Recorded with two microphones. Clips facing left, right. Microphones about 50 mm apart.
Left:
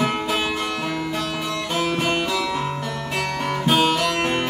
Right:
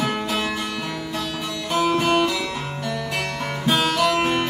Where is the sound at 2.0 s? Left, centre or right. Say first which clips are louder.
Right 3 dB; centre.